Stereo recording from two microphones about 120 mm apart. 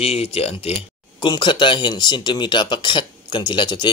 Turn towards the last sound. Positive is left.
turn(degrees=40)  # may be behind; listen again after turning